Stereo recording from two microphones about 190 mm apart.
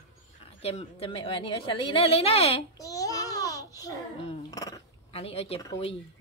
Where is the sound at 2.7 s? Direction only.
20° left (ahead or behind).